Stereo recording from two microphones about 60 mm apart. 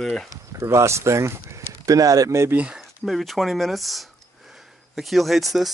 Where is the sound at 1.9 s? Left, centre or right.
Right.